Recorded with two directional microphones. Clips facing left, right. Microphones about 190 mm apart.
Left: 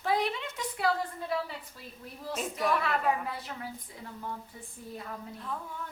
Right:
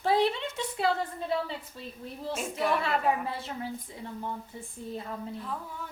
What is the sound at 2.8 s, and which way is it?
A woman's voice, 30° right (ahead or behind).